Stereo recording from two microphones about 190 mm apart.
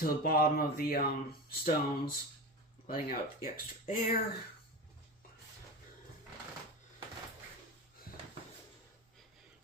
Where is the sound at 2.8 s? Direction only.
50° left (ahead or behind).